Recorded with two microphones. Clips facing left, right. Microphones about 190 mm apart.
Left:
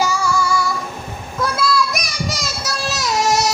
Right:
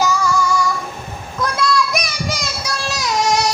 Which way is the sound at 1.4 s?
5° left (ahead or behind).